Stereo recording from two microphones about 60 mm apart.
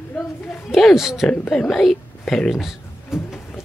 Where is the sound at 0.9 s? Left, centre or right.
Centre.